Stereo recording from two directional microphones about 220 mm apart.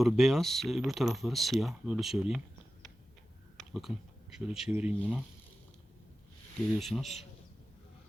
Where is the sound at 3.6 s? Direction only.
Centre (ahead or behind).